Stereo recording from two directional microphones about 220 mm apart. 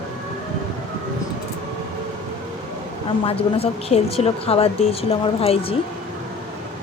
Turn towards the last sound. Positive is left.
turn(degrees=25)  # may be behind; listen again after turning